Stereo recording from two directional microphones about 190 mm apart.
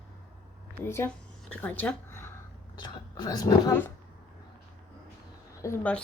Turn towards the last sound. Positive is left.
turn(degrees=10)  # may be behind; listen again after turning